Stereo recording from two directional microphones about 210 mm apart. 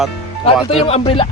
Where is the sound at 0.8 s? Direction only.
25° left (ahead or behind).